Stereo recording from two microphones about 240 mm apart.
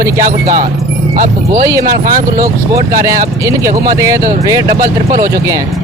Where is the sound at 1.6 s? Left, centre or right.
Centre.